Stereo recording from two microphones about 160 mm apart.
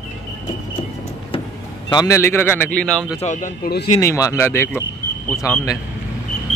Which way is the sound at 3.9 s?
20° left (ahead or behind).